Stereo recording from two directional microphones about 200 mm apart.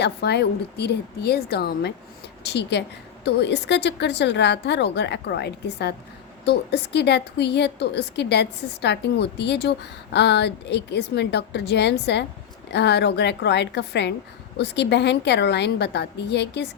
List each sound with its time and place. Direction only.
0.0 s a woman's voice: 55° left (ahead or behind)